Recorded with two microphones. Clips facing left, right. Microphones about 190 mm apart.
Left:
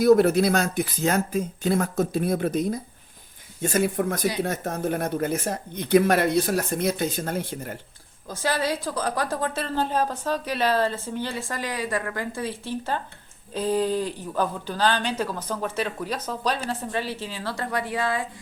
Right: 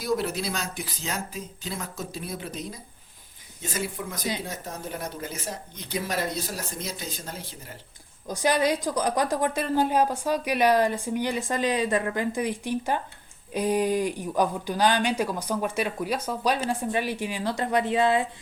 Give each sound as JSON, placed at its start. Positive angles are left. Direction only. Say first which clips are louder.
{"t": 0.0, "sound": "speech", "louder": "left 11 dB", "side_deg": 55}
{"t": 8.3, "sound": "a woman's voice", "louder": "right 2 dB", "side_deg": -15}